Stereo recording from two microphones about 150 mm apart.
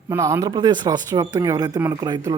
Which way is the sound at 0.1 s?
20° right (ahead or behind).